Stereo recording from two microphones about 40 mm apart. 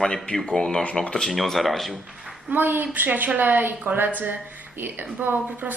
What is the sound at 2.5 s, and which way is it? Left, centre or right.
Speech, right.